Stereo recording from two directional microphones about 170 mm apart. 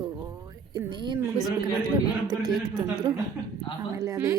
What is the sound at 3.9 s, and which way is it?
Speech, 20° right (ahead or behind).